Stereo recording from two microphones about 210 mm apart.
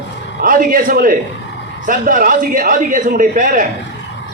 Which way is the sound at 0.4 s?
40° right (ahead or behind).